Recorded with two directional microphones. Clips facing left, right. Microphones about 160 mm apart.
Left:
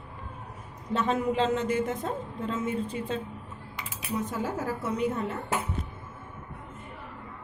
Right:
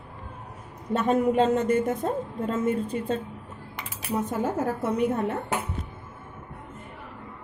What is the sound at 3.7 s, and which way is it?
Cutlery, 50° right (ahead or behind).